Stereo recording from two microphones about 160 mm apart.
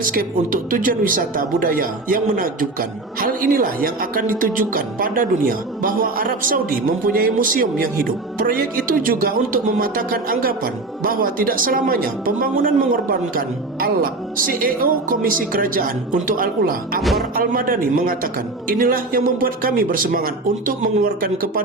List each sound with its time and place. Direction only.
0.0 s a woman's voice: 60° right (ahead or behind)
17.0 s music: centre (ahead or behind)
17.3 s a woman's voice: 65° right (ahead or behind)